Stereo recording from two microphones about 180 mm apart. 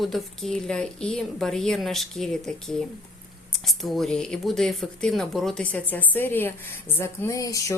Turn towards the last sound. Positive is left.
turn(degrees=15)  # may be behind; listen again after turning